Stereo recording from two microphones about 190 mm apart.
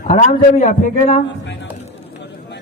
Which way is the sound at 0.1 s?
40° left (ahead or behind).